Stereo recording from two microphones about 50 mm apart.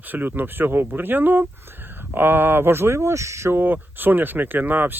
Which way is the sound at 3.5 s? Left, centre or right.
Right.